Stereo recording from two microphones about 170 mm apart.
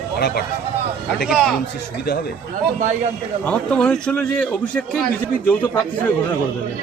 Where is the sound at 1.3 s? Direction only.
Centre (ahead or behind).